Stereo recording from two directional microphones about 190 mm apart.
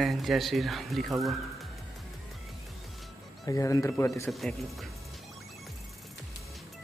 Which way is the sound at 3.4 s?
15° left (ahead or behind).